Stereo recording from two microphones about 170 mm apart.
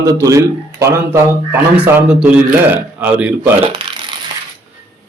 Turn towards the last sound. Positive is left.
turn(degrees=-30)  # may be behind; listen again after turning